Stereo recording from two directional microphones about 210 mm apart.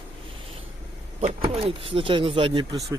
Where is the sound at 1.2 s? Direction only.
25° right (ahead or behind).